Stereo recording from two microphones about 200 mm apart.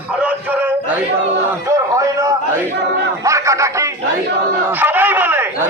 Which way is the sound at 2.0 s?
15° right (ahead or behind).